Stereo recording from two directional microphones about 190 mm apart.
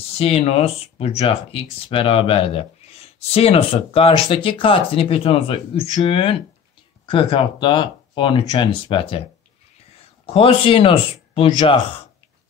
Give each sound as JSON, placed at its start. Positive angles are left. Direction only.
{"t": 0.2, "sound": "speech", "side_deg": 30}
{"t": 10.2, "sound": "speech", "side_deg": 30}